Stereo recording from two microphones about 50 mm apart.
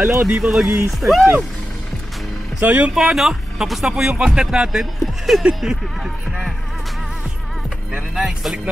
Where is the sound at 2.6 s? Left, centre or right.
Right.